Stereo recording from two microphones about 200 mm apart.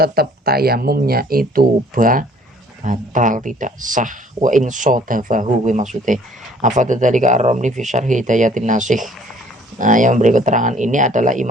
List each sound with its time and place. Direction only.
0.0 s speech: 50° right (ahead or behind)